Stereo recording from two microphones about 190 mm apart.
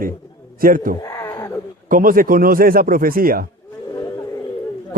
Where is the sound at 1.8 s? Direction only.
45° right (ahead or behind).